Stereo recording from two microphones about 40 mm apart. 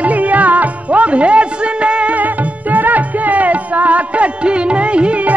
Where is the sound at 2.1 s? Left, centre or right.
Right.